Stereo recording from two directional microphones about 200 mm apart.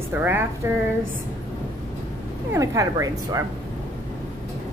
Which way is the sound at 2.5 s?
15° right (ahead or behind).